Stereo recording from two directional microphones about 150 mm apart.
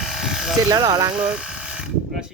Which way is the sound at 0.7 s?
25° right (ahead or behind).